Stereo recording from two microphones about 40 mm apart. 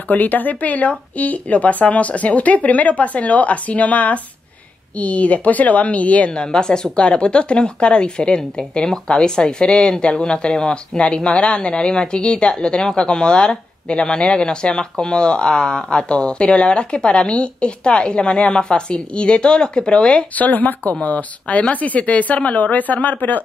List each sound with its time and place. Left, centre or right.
0.1 s speech: left
6.3 s speech: centre
20.3 s speech: left